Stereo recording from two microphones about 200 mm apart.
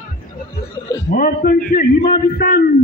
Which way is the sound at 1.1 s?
45° left (ahead or behind).